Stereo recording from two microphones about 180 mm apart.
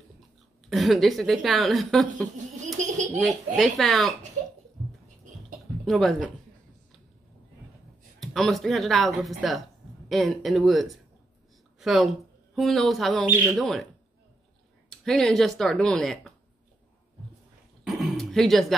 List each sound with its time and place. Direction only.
0.7 s a woman's voice: centre (ahead or behind)
2.8 s speech: 40° right (ahead or behind)
3.2 s a woman's voice: centre (ahead or behind)
5.9 s a woman's voice: centre (ahead or behind)
8.2 s a woman's voice: centre (ahead or behind)
14.9 s a woman's voice: 5° left (ahead or behind)
17.8 s a sound: centre (ahead or behind)